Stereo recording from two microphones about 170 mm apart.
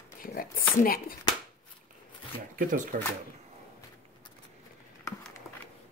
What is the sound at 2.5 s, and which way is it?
Speech, 50° right (ahead or behind).